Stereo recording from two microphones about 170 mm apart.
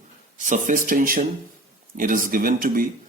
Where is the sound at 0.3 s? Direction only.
50° right (ahead or behind).